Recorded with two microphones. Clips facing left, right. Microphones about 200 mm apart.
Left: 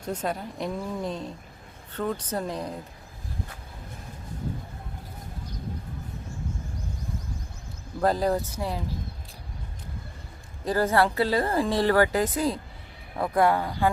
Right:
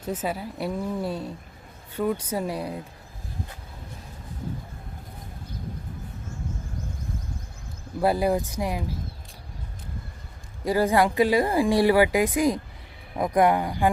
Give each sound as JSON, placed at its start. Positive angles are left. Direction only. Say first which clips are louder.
{"t": 0.0, "sound": "speech", "louder": "right 1 dB", "side_deg": -5}
{"t": 8.0, "sound": "speech", "louder": "right 1 dB", "side_deg": -10}
{"t": 10.6, "sound": "speech", "louder": "right 2 dB", "side_deg": -10}